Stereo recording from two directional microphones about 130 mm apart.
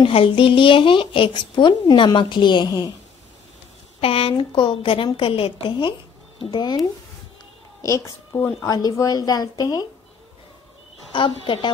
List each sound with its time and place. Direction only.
0.0 s speech: 45° left (ahead or behind)
4.0 s a woman's voice: 45° left (ahead or behind)
7.8 s a child's voice: 25° left (ahead or behind)
8.6 s a woman's voice: 30° left (ahead or behind)
11.1 s speech: 40° left (ahead or behind)